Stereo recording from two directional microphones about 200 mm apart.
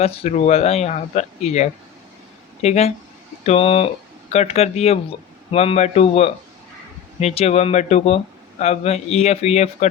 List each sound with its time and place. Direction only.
0.0 s speech: 30° left (ahead or behind)